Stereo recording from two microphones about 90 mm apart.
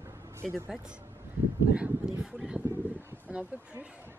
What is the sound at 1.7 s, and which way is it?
Speech, 15° right (ahead or behind).